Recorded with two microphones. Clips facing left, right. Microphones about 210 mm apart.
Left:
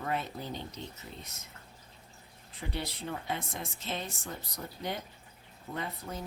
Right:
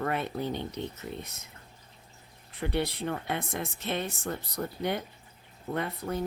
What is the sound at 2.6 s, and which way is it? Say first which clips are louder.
Speech: right 8 dB; 60° right (ahead or behind).